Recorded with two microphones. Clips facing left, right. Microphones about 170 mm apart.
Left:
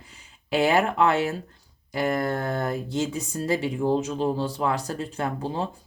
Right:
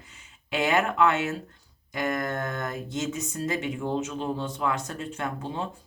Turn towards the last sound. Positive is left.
turn(degrees=35)  # may be behind; listen again after turning